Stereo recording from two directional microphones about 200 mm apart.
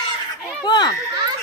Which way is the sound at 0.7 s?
20° left (ahead or behind).